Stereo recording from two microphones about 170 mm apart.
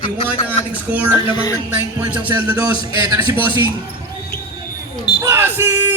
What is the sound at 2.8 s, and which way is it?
Speech, 25° right (ahead or behind).